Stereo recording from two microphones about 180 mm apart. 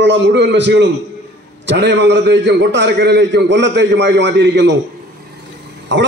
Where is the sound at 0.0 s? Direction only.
75° right (ahead or behind).